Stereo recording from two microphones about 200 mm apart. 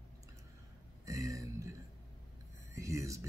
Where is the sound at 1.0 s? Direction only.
15° right (ahead or behind).